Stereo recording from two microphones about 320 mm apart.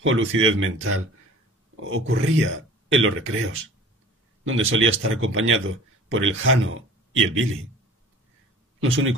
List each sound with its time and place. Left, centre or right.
0.0 s a man's voice: right